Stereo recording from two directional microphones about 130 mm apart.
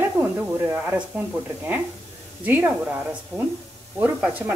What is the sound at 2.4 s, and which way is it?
Speech, 15° right (ahead or behind).